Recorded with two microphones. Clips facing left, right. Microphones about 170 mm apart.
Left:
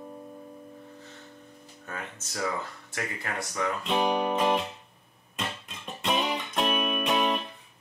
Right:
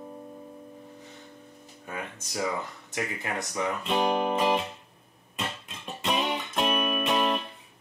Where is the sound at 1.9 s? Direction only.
15° right (ahead or behind).